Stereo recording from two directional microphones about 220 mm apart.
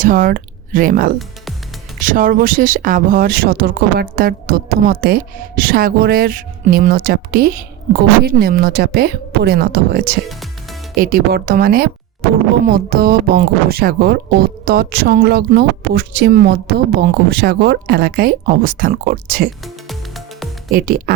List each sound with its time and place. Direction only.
0.0 s speech: 40° right (ahead or behind)
10.2 s music: centre (ahead or behind)
10.9 s speech: 40° right (ahead or behind)
19.6 s music: centre (ahead or behind)
20.7 s speech: 40° right (ahead or behind)